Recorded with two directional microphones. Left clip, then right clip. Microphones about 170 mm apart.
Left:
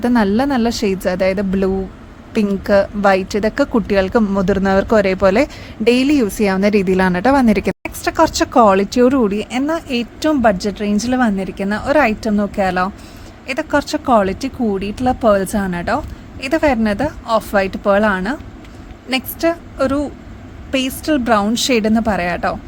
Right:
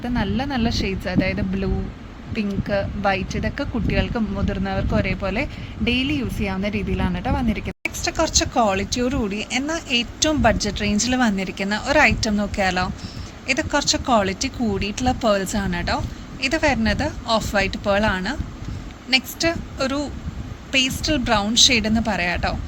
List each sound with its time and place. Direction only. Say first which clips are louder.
0.0 s speech: left 10 dB; 65° left (ahead or behind); by 7.8 s 90° left
7.8 s speech: left 7 dB; 50° left (ahead or behind)